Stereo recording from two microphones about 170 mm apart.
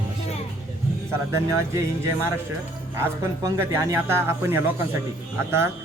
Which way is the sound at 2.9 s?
15° right (ahead or behind).